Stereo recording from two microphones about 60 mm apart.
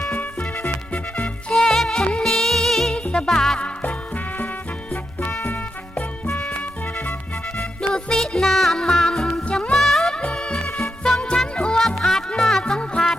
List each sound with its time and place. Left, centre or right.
0.1 s music: left
1.5 s music: centre
5.5 s music: left
7.8 s music: centre
9.7 s music: centre